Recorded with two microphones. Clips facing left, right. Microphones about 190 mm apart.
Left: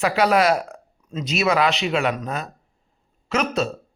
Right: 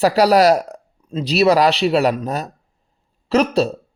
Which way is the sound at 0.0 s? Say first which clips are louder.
Right 5 dB; 35° right (ahead or behind).